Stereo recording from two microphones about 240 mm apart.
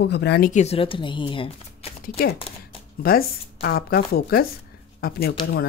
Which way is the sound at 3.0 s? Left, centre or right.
Left.